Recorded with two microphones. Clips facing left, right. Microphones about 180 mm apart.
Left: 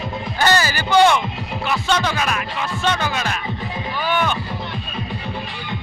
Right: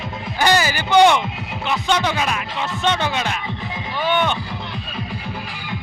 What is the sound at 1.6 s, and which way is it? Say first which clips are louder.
Speech: right 1 dB; 15° right (ahead or behind).